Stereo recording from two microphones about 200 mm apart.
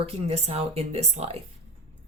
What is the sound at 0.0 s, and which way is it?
Speech, 30° right (ahead or behind).